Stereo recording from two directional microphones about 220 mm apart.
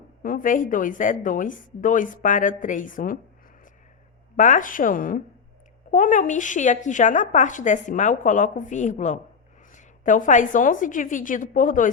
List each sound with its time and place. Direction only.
0.2 s a woman's voice: 40° left (ahead or behind)
4.4 s a woman's voice: 35° left (ahead or behind)